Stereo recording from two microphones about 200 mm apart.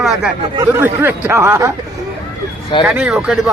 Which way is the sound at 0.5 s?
15° right (ahead or behind).